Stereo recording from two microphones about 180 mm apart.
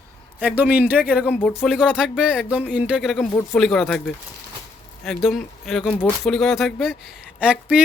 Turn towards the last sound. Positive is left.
turn(degrees=-5)  # may be behind; listen again after turning